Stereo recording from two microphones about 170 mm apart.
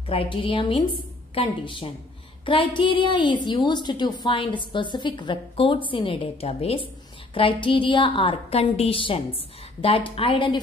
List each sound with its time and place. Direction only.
0.0 s a woman's voice: 35° left (ahead or behind)